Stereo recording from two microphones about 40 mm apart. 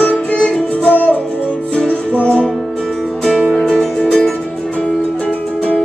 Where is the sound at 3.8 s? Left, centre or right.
Centre.